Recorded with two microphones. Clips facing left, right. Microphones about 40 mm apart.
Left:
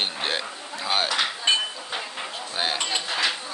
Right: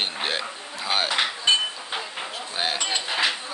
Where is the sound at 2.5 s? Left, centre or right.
Centre.